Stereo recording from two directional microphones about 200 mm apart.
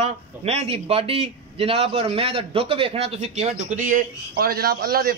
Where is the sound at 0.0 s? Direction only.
30° right (ahead or behind).